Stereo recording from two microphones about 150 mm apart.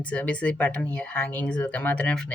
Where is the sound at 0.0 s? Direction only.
10° left (ahead or behind).